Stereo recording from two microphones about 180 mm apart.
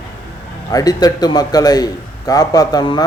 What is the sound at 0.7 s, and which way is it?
A man's voice, 20° left (ahead or behind).